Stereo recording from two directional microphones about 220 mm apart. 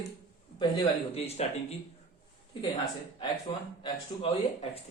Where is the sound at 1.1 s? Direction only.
30° left (ahead or behind).